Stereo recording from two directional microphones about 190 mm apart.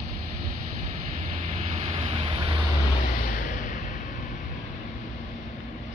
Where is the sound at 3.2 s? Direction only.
45° left (ahead or behind).